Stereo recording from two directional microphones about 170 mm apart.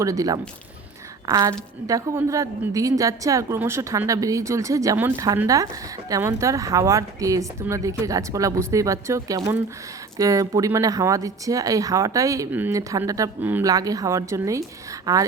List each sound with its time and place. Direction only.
0.0 s speech: 20° right (ahead or behind)